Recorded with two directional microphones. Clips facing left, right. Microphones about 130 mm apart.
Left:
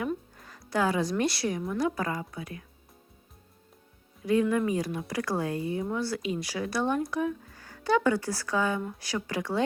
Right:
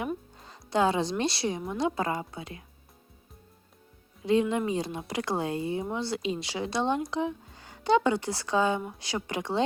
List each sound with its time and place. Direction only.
0.3 s music: 25° right (ahead or behind)
0.7 s speech: 25° right (ahead or behind)
4.3 s speech: 25° right (ahead or behind)